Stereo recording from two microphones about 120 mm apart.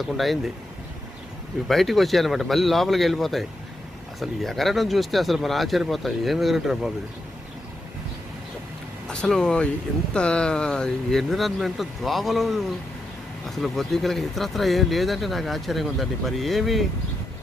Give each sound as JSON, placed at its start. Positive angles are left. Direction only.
{"t": 0.0, "sound": "speech", "side_deg": 0}
{"t": 1.7, "sound": "speech", "side_deg": 0}
{"t": 9.1, "sound": "speech", "side_deg": 5}